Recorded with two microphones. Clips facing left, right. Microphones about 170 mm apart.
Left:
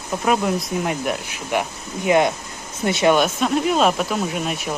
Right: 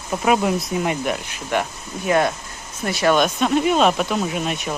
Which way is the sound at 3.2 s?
Centre (ahead or behind).